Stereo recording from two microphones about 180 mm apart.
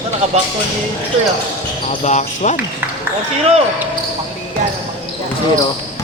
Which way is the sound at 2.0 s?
40° left (ahead or behind).